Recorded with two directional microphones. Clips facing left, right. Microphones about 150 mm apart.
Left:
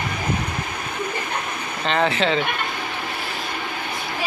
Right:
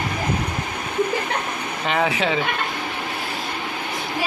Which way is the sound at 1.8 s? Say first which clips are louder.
Left 1 dB; 10° right (ahead or behind).